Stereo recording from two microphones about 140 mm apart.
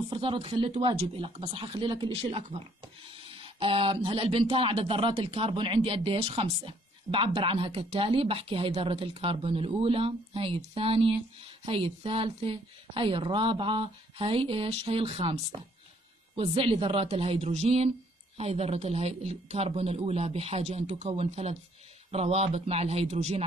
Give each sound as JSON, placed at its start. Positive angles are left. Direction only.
{"t": 0.1, "sound": "speech", "side_deg": -40}